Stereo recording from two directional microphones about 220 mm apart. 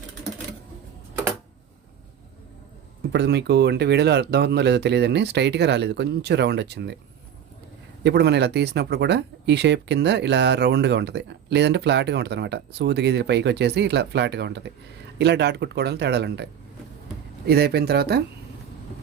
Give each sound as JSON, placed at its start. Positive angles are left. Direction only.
{"t": 3.1, "sound": "speech", "side_deg": -50}
{"t": 8.0, "sound": "speech", "side_deg": -50}